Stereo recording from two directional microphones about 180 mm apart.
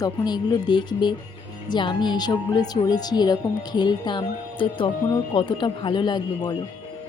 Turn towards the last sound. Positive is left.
turn(degrees=25)  # may be behind; listen again after turning